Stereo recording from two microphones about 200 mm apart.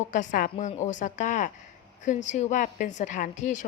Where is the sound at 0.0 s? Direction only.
40° left (ahead or behind).